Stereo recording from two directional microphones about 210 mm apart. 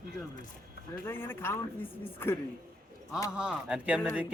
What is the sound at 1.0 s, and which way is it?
A woman's voice, 10° left (ahead or behind).